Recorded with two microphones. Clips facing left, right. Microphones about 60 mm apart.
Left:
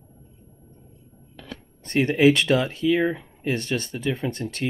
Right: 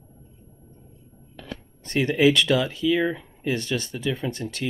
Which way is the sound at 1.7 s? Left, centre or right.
Left.